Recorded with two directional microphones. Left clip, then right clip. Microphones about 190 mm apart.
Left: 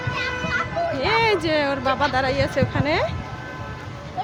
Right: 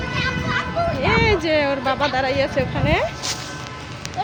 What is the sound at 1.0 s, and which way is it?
Speech, 15° left (ahead or behind).